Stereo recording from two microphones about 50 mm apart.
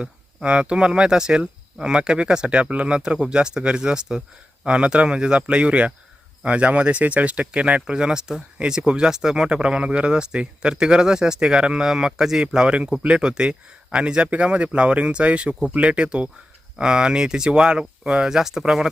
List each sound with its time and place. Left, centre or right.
0.4 s speech: right